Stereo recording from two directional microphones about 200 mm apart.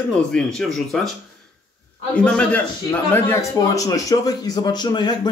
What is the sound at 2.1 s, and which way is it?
A man's voice, 5° left (ahead or behind).